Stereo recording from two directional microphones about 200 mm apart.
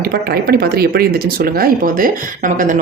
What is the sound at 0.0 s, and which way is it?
Speech, 50° right (ahead or behind).